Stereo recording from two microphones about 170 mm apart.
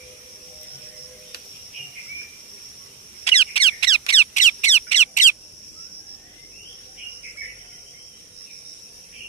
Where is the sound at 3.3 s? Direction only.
35° left (ahead or behind).